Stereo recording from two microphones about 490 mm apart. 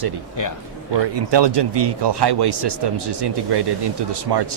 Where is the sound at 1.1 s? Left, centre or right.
Right.